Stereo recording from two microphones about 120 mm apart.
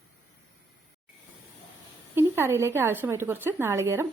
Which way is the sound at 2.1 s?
20° right (ahead or behind).